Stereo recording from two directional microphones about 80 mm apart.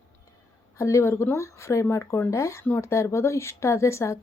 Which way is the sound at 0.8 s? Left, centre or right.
Left.